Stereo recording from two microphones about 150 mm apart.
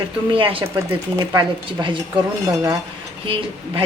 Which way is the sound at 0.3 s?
35° right (ahead or behind).